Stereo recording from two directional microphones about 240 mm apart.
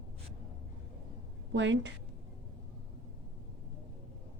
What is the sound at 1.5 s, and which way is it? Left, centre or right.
Speech, right.